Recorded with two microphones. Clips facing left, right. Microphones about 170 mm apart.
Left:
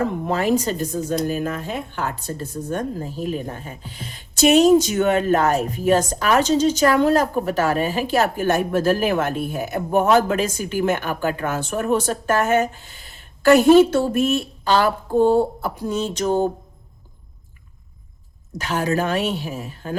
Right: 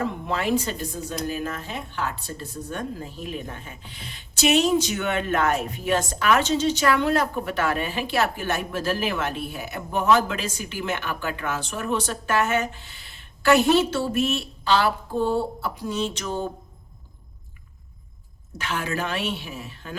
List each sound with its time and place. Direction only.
0.0 s speech: 45° left (ahead or behind)
18.5 s a woman's voice: 40° left (ahead or behind)